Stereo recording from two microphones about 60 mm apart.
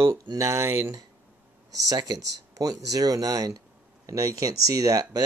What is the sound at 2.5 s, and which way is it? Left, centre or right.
Speech, right.